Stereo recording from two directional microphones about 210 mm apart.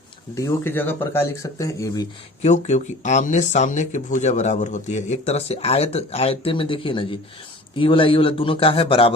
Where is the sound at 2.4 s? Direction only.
35° left (ahead or behind).